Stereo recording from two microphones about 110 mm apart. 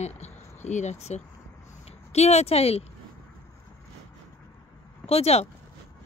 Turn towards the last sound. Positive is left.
turn(degrees=70)  # may be behind; listen again after turning